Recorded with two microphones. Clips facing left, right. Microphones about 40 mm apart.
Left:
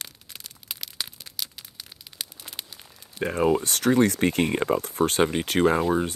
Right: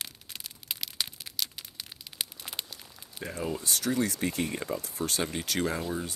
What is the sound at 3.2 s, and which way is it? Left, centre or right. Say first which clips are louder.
Speech: left 12 dB; left.